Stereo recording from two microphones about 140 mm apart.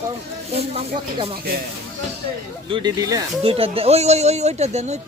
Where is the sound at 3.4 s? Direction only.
45° right (ahead or behind).